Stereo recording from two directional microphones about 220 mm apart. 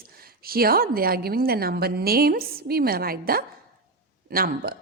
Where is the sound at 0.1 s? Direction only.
45° right (ahead or behind).